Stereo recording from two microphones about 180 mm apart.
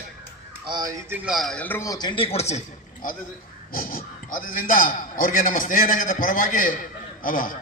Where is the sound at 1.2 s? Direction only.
Centre (ahead or behind); by 2.6 s 35° left (ahead or behind).